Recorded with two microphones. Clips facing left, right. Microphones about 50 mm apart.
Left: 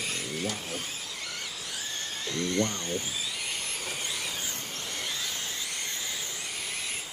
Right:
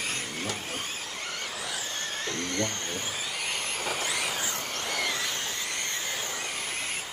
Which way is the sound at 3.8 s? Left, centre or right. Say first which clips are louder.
Right 5 dB; right.